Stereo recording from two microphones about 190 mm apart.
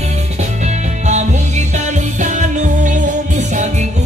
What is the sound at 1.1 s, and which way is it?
Music, 35° right (ahead or behind).